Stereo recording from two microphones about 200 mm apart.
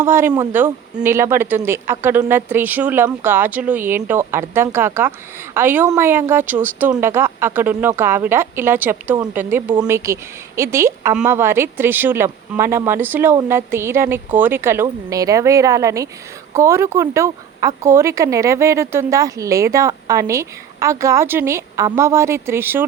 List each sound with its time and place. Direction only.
0.0 s speech: 10° right (ahead or behind)